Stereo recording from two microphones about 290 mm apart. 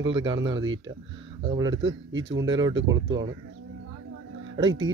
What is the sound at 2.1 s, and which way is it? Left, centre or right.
Speech, right.